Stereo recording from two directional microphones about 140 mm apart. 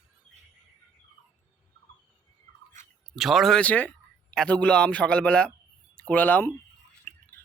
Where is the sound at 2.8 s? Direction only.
60° right (ahead or behind).